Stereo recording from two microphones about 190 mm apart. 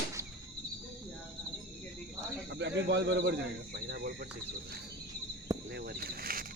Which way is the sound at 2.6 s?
65° right (ahead or behind).